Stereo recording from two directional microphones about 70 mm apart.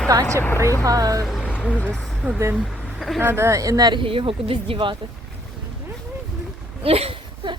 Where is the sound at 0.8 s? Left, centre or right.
Right.